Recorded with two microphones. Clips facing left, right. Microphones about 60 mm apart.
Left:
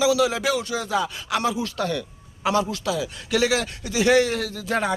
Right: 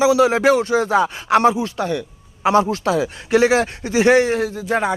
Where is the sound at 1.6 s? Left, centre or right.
Right.